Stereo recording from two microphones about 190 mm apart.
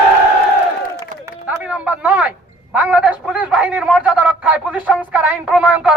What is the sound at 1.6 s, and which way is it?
A man's voice, 10° right (ahead or behind).